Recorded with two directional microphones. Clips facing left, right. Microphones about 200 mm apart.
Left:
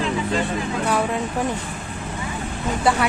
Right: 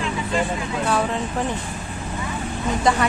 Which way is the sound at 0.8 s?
10° left (ahead or behind).